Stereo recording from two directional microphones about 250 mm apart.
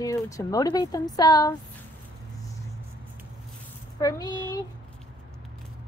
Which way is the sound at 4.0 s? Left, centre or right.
Centre.